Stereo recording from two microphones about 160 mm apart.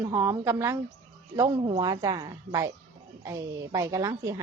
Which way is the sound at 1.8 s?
25° right (ahead or behind).